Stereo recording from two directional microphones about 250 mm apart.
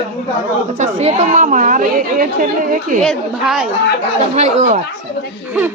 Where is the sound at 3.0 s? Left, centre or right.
Centre.